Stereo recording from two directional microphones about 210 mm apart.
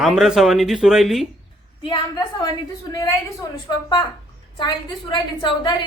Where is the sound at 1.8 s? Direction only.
20° left (ahead or behind).